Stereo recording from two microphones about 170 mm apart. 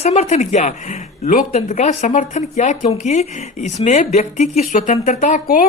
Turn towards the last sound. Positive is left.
turn(degrees=50)  # may be behind; listen again after turning